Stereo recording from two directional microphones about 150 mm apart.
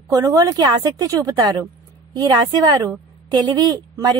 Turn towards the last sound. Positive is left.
turn(degrees=-25)  # may be behind; listen again after turning